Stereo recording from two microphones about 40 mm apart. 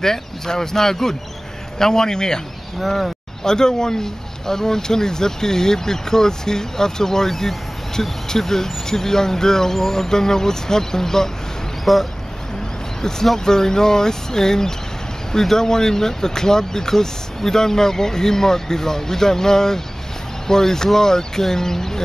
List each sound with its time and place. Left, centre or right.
0.0 s speech: centre
2.8 s speech: centre
3.4 s speech: centre
11.8 s speech: centre